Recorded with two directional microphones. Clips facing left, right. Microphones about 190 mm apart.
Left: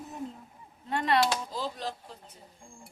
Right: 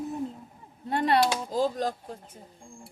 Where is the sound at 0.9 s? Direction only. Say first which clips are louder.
Right 3 dB; 35° right (ahead or behind).